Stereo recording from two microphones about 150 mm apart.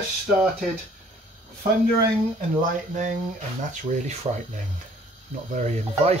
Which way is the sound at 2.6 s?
55° right (ahead or behind).